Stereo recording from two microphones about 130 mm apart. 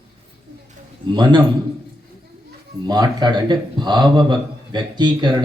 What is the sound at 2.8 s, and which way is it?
A man's voice, 30° right (ahead or behind).